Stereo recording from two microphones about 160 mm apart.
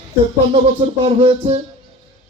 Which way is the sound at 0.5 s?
40° right (ahead or behind).